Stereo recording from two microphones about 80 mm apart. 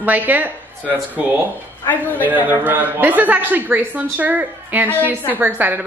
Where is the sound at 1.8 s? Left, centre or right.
Left.